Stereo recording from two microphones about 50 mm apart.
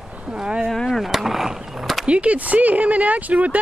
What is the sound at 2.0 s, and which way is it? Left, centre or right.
Speech, right.